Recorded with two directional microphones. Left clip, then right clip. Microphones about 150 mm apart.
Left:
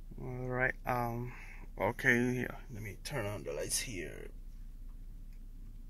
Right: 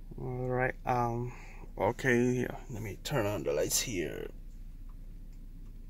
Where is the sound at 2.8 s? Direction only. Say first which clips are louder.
Right 7 dB; 70° right (ahead or behind).